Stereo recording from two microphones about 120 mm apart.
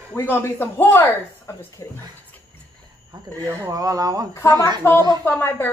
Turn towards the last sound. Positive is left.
turn(degrees=15)  # may be behind; listen again after turning